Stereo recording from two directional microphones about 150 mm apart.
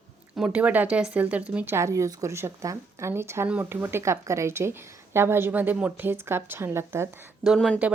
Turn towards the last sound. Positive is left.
turn(degrees=0)  # may be behind; listen again after turning